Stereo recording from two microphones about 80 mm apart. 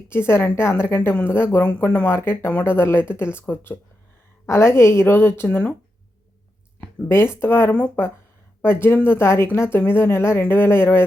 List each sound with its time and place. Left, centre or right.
0.1 s a woman's voice: left
2.0 s speech: left
4.4 s a woman's voice: left
7.1 s a woman's voice: left